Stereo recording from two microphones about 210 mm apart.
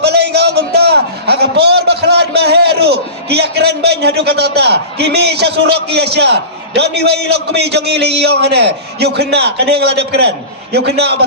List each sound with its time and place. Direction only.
0.0 s a man's voice: 50° right (ahead or behind)